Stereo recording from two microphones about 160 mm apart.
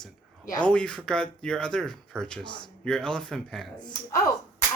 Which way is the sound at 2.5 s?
30° left (ahead or behind).